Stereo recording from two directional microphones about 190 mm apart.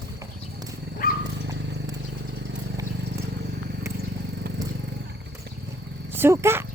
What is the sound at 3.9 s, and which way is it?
Vehicle, 55° right (ahead or behind).